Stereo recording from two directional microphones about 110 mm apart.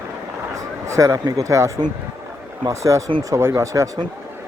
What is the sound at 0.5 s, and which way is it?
Speech, 30° right (ahead or behind).